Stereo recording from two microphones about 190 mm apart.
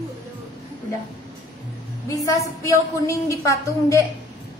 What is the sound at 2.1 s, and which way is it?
A woman's voice, 15° left (ahead or behind).